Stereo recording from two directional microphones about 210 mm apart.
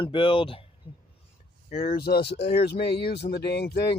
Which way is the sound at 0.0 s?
25° left (ahead or behind).